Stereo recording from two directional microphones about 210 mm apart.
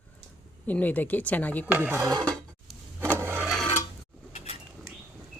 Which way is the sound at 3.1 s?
10° right (ahead or behind).